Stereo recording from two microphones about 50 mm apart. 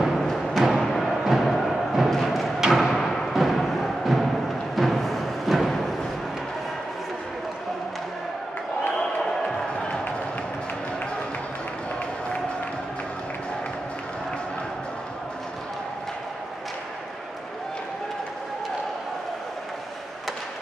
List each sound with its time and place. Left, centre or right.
0.0 s thump: centre
0.8 s music: centre
9.2 s a sound: centre